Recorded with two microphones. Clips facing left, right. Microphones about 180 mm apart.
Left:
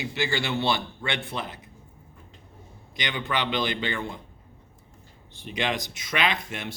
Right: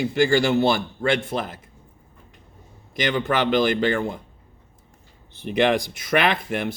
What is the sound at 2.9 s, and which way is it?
Speech, 45° right (ahead or behind).